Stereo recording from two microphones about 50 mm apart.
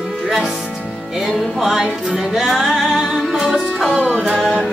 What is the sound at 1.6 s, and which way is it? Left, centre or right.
Music, centre.